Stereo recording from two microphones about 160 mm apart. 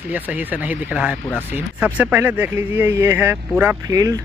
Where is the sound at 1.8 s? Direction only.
10° right (ahead or behind).